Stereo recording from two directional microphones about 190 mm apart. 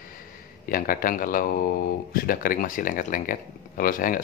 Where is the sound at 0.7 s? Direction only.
50° left (ahead or behind).